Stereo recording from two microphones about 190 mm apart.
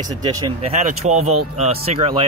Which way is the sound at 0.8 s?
35° right (ahead or behind).